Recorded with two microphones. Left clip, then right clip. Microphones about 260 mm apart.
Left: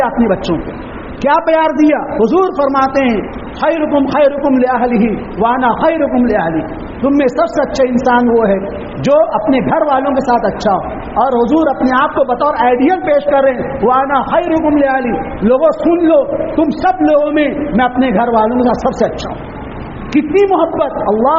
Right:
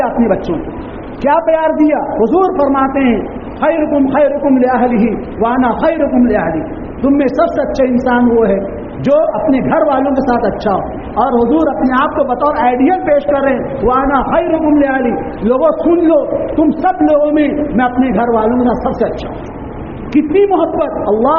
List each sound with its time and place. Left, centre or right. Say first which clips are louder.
1.3 s a man's voice: even; left
20.1 s a man's voice: even; left